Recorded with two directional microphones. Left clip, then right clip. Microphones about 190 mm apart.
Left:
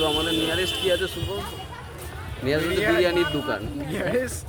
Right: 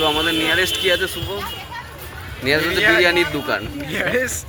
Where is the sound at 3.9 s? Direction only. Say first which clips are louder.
Right 5 dB; 10° left (ahead or behind).